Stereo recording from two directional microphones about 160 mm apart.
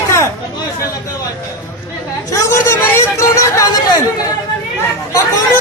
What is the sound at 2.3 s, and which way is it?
Speech, 15° left (ahead or behind).